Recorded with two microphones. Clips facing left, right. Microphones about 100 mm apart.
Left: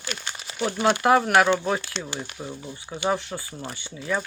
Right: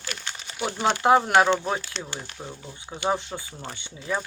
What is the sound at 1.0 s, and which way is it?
Speech, 25° right (ahead or behind).